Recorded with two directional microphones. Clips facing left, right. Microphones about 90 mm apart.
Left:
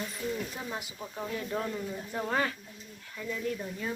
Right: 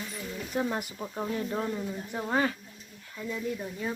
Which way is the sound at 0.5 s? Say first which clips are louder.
Right 8 dB; 55° right (ahead or behind).